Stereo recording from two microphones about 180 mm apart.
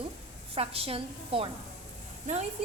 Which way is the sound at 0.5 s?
35° right (ahead or behind).